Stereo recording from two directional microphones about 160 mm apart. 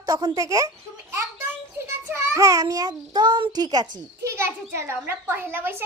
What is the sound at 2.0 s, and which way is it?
A child's voice, 15° right (ahead or behind).